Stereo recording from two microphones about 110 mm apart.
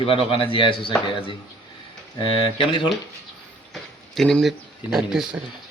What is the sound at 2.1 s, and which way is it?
Speech, 50° left (ahead or behind).